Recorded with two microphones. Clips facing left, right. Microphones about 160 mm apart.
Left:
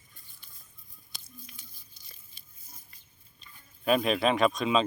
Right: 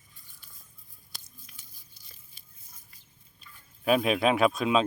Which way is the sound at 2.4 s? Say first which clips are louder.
Left 1 dB; 5° right (ahead or behind).